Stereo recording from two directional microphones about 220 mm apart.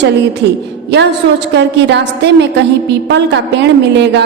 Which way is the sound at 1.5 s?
50° right (ahead or behind).